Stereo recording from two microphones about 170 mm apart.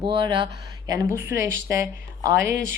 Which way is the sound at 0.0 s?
30° right (ahead or behind).